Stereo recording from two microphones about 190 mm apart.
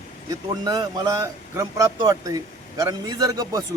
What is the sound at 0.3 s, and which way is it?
A man's voice, 20° right (ahead or behind).